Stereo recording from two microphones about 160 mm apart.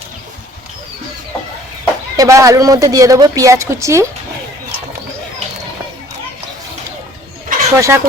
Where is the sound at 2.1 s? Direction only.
20° right (ahead or behind).